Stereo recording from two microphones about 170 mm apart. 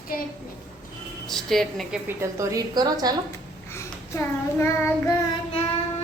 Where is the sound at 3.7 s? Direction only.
15° left (ahead or behind).